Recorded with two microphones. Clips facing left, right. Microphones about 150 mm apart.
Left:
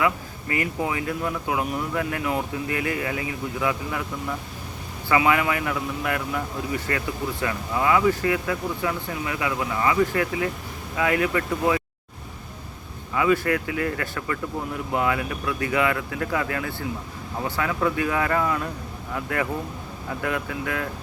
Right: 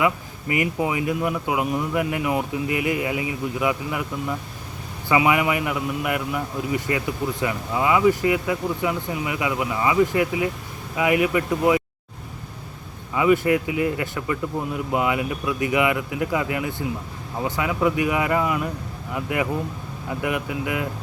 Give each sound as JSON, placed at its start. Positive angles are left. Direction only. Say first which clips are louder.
{"t": 0.0, "sound": "speech", "louder": "right 2 dB", "side_deg": -20}
{"t": 13.1, "sound": "speech", "louder": "right 3 dB", "side_deg": -20}